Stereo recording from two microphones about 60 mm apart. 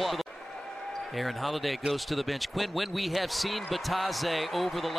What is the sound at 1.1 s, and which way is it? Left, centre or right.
Speech, centre.